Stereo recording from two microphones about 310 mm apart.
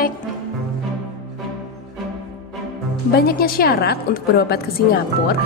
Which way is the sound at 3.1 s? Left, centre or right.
Left.